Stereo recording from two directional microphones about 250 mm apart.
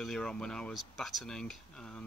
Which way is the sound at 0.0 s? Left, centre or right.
Centre.